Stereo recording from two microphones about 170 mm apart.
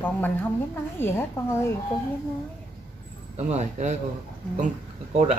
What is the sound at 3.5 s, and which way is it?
Speech, 45° right (ahead or behind).